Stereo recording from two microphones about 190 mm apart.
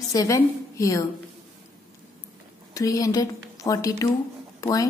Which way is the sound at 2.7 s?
20° left (ahead or behind).